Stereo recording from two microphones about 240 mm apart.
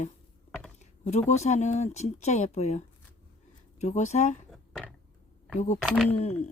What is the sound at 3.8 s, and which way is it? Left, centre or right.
Speech, left.